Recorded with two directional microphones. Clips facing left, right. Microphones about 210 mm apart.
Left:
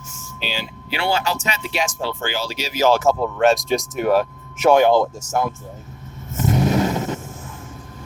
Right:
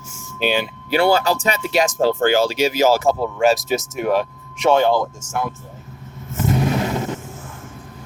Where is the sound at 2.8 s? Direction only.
5° right (ahead or behind); by 5.0 s 15° left (ahead or behind).